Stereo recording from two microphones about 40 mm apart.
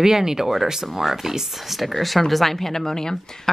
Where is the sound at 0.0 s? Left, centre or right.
Centre.